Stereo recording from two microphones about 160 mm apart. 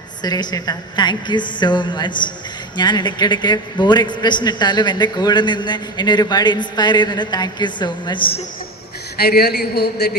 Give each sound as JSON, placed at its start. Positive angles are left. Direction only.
{"t": 0.2, "sound": "a man's voice", "side_deg": 25}
{"t": 9.1, "sound": "a man's voice", "side_deg": 80}